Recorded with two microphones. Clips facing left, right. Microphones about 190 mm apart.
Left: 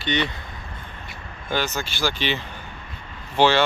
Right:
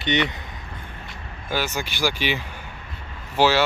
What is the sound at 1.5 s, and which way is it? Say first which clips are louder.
Speech: left 1 dB; 10° right (ahead or behind).